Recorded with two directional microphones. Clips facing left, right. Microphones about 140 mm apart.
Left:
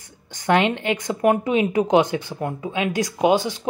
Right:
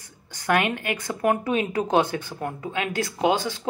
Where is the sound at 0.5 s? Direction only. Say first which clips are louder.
Left 4 dB; 25° left (ahead or behind).